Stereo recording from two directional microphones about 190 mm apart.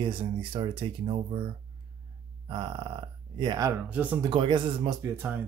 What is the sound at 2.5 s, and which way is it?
Speech, 25° right (ahead or behind).